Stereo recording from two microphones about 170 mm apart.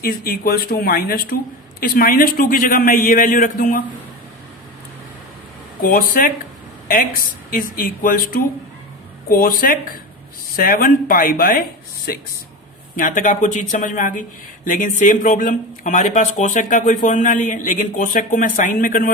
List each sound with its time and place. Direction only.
0.0 s a man's voice: 60° left (ahead or behind)
5.8 s a man's voice: 55° left (ahead or behind)
13.0 s speech: 50° left (ahead or behind)